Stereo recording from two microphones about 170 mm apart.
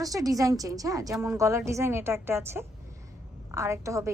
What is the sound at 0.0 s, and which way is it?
A woman's voice, 20° right (ahead or behind).